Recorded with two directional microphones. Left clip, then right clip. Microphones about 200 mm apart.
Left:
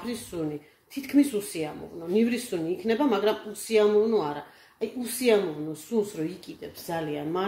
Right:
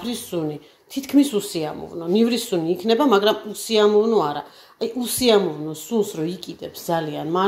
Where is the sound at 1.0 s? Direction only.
35° right (ahead or behind).